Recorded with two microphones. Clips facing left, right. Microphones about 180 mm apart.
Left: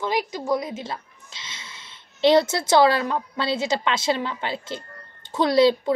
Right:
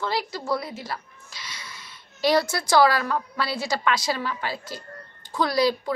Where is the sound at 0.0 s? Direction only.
15° left (ahead or behind).